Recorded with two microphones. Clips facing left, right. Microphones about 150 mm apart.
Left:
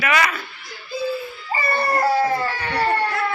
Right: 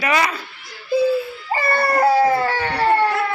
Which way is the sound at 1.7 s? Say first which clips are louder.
Right 3 dB; 60° right (ahead or behind).